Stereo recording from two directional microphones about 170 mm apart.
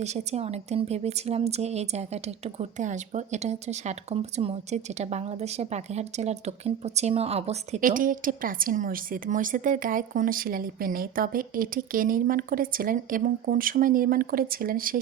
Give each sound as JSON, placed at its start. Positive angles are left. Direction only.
{"t": 0.0, "sound": "speech", "side_deg": -40}
{"t": 7.8, "sound": "speech", "side_deg": -50}